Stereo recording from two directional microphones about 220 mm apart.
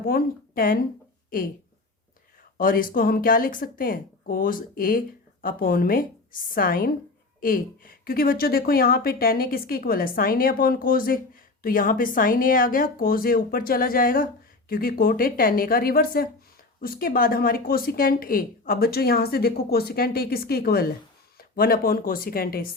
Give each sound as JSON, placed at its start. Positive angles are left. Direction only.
{"t": 0.0, "sound": "speech", "side_deg": 40}
{"t": 2.6, "sound": "speech", "side_deg": 40}